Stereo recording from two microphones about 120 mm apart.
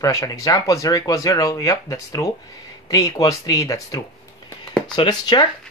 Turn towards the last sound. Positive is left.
turn(degrees=40)  # may be behind; listen again after turning